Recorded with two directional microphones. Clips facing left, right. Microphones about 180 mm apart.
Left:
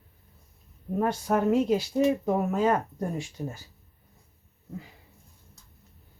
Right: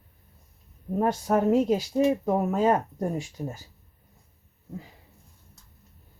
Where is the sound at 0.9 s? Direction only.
35° right (ahead or behind).